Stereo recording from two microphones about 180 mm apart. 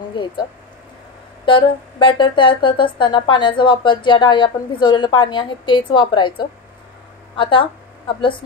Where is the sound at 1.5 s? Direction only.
25° left (ahead or behind).